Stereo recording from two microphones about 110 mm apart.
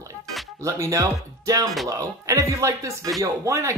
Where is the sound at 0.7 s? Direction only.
30° right (ahead or behind).